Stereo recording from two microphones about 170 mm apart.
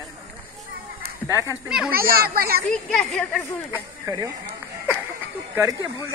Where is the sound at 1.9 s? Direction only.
60° right (ahead or behind).